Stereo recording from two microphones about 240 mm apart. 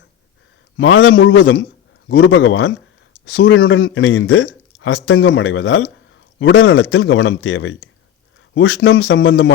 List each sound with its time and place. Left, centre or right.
0.8 s speech: left